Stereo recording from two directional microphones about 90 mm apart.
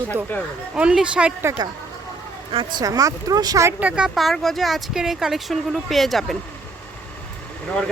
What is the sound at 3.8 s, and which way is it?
Speech, 10° right (ahead or behind).